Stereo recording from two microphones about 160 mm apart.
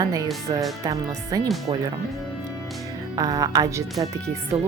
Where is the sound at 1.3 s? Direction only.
20° right (ahead or behind).